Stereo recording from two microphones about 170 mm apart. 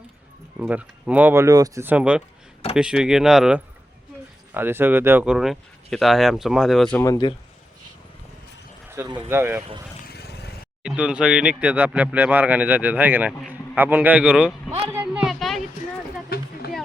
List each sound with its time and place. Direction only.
0.6 s speech: 10° right (ahead or behind)
7.0 s speech: 25° left (ahead or behind)
9.0 s speech: 25° right (ahead or behind)
9.3 s speech: 15° right (ahead or behind)
10.1 s vehicle: 70° left (ahead or behind)
10.8 s speech: 5° right (ahead or behind)
14.9 s a sound: 5° right (ahead or behind)
16.3 s a sound: 65° left (ahead or behind)